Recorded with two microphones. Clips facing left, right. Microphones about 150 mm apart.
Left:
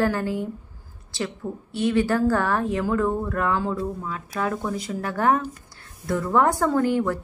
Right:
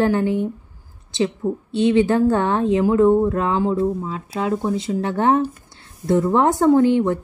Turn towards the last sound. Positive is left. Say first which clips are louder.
# right 7 dB
turn(degrees=-20)  # may be behind; listen again after turning